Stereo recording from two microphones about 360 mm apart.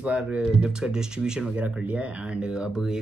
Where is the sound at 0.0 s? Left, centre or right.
Centre.